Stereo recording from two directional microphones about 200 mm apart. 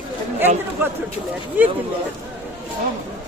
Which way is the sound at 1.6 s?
10° right (ahead or behind).